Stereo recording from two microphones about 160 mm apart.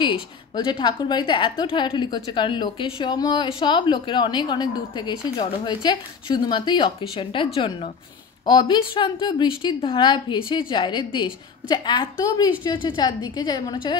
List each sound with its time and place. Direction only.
0.7 s a woman's voice: 30° left (ahead or behind)